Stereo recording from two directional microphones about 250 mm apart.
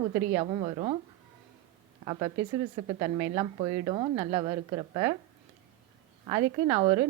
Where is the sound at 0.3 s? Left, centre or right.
Right.